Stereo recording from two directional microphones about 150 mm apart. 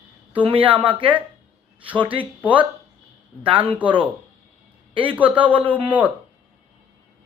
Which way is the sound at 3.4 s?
35° right (ahead or behind).